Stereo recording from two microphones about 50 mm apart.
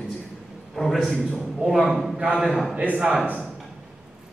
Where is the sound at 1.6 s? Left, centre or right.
Centre.